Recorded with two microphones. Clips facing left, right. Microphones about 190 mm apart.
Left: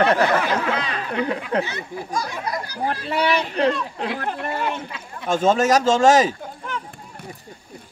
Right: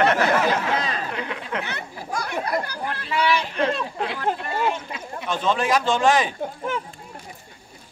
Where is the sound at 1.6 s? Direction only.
60° right (ahead or behind).